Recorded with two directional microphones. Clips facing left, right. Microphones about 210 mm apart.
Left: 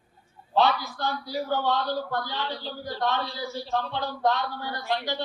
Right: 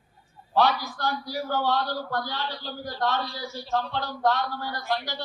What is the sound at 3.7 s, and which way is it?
Speech, 20° left (ahead or behind).